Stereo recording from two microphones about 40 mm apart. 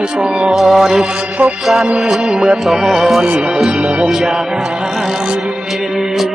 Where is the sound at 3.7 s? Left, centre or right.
Right.